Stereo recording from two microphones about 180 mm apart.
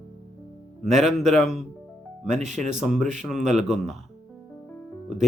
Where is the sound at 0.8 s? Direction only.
Centre (ahead or behind).